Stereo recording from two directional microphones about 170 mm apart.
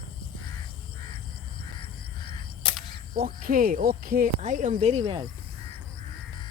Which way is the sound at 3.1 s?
60° right (ahead or behind).